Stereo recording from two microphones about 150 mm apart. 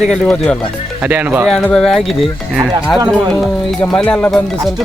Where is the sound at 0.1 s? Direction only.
5° left (ahead or behind).